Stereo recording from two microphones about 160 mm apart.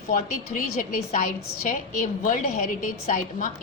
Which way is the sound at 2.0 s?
55° left (ahead or behind).